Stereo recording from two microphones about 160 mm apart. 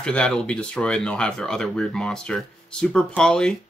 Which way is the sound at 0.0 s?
5° left (ahead or behind).